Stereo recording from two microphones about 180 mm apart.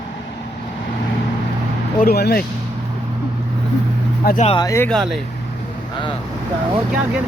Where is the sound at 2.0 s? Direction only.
60° left (ahead or behind).